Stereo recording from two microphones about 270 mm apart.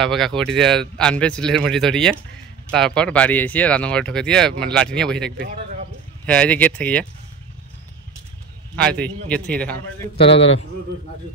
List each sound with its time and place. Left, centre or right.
0.0 s speech: centre
5.5 s a sound: right
6.2 s speech: centre
8.7 s speech: centre